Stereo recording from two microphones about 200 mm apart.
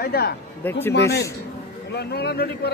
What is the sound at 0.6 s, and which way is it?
Speech, 10° left (ahead or behind).